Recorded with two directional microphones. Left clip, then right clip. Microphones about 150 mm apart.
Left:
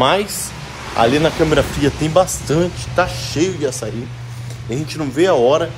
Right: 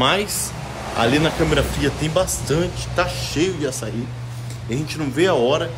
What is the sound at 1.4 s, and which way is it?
Speech, 10° left (ahead or behind).